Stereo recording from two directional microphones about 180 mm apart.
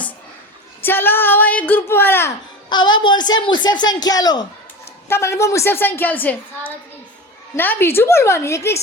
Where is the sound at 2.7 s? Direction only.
25° left (ahead or behind).